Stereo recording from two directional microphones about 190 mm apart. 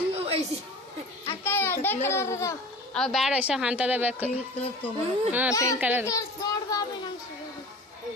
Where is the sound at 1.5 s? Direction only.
10° left (ahead or behind).